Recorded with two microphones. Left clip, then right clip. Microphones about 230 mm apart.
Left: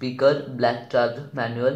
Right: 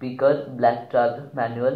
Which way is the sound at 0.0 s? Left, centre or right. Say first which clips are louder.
Even; centre.